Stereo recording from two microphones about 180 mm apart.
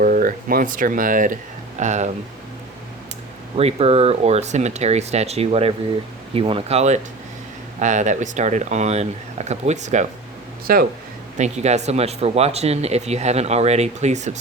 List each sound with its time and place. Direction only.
0.0 s speech: 50° right (ahead or behind)
3.5 s speech: 35° right (ahead or behind)
10.7 s speech: 55° right (ahead or behind)
11.3 s speech: 40° right (ahead or behind)